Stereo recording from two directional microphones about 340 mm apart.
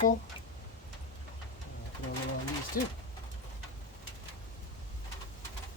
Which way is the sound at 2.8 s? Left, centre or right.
Left.